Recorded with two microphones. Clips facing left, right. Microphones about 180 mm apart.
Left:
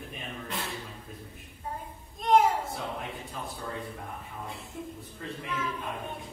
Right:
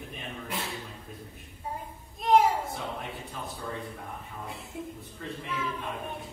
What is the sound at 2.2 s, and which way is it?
A child's voice, centre (ahead or behind).